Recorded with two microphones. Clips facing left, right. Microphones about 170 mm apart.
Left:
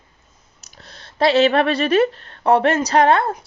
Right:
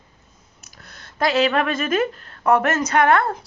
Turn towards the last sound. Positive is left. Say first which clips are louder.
# left 2 dB
turn(degrees=30)  # may be behind; listen again after turning